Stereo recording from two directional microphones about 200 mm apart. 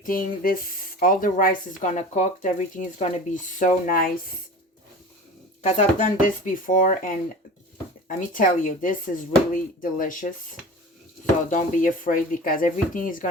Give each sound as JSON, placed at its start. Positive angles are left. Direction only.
{"t": 0.0, "sound": "speech", "side_deg": 45}
{"t": 5.6, "sound": "speech", "side_deg": 40}
{"t": 11.4, "sound": "speech", "side_deg": 40}